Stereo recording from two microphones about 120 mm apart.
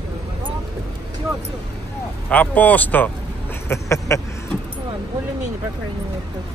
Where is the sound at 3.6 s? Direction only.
25° left (ahead or behind).